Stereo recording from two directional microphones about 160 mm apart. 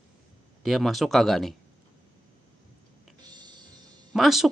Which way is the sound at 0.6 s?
Centre (ahead or behind).